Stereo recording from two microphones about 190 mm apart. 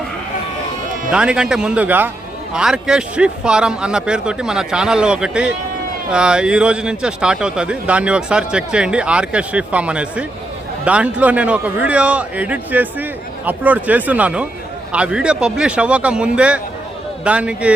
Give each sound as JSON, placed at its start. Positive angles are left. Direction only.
{"t": 1.1, "sound": "a man's voice", "side_deg": -5}